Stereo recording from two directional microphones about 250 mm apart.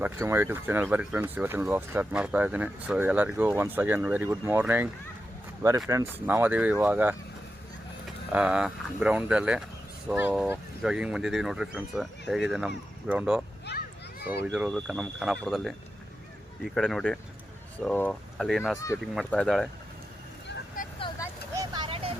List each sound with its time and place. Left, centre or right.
0.0 s speech: centre
5.9 s speech: centre
8.3 s speech: centre
13.7 s a sound: left
14.4 s speech: centre
20.8 s vehicle: left
21.5 s vehicle: centre